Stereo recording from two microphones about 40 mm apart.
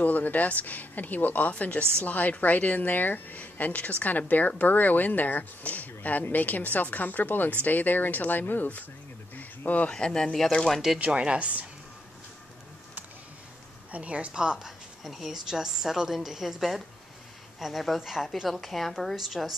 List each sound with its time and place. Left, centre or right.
0.0 s a woman's voice: left
1.5 s a woman's voice: left
9.3 s a sound: left
9.8 s speech: left
11.1 s speech: right
13.9 s speech: right
14.3 s a woman's voice: right
15.0 s a woman's voice: centre
18.5 s a woman's voice: centre
19.1 s a woman's voice: centre